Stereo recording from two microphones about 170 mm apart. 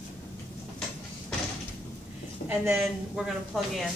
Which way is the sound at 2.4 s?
10° right (ahead or behind).